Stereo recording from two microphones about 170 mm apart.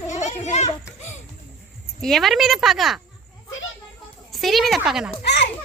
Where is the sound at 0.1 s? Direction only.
45° left (ahead or behind).